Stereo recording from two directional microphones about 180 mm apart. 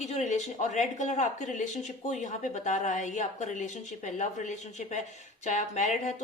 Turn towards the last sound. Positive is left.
turn(degrees=45)  # may be behind; listen again after turning